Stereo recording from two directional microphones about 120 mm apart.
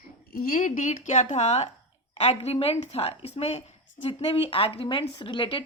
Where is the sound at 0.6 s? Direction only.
90° left; by 3.6 s 60° left (ahead or behind).